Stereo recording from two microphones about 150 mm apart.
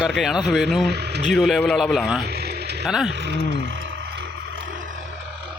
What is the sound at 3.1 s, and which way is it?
Speech, 90° right.